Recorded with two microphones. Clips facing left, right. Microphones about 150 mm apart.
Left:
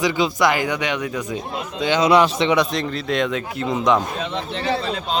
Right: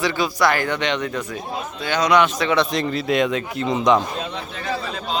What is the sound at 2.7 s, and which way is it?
A man's voice, centre (ahead or behind).